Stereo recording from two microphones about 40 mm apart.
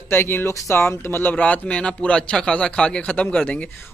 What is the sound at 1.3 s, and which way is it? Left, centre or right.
Speech, left.